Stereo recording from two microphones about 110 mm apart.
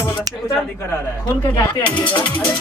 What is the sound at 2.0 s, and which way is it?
Speech, 15° left (ahead or behind).